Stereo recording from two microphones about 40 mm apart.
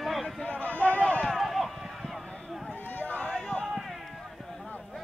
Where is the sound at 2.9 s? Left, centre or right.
Left.